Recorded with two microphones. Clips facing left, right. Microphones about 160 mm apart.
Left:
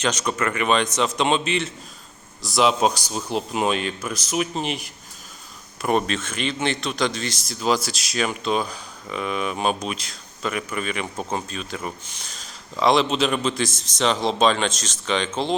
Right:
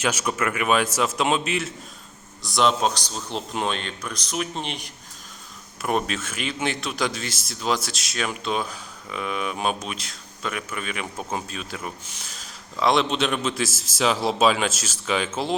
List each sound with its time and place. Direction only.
0.0 s a man's voice: 10° right (ahead or behind)